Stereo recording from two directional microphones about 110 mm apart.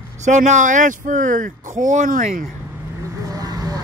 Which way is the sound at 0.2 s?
90° right.